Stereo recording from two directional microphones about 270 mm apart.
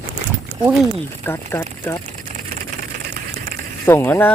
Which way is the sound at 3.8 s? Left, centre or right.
Centre.